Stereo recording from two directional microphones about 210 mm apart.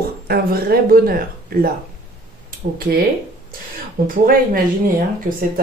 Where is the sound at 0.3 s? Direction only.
45° right (ahead or behind).